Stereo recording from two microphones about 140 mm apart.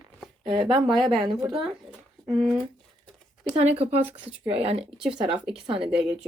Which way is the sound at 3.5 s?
50° right (ahead or behind).